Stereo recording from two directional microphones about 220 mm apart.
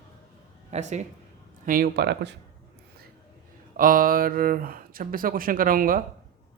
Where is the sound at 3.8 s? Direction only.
40° right (ahead or behind).